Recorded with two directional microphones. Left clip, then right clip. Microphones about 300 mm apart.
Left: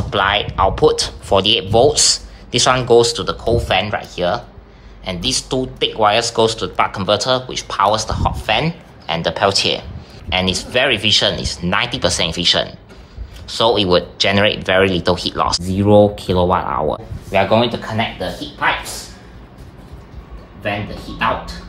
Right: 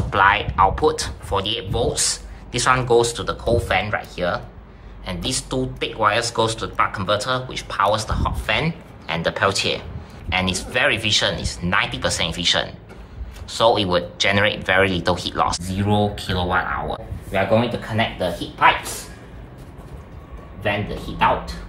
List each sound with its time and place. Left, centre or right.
0.1 s speech: centre
17.3 s speech: left